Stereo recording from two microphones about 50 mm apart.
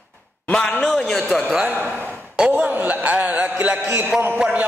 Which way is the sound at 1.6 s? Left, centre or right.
Right.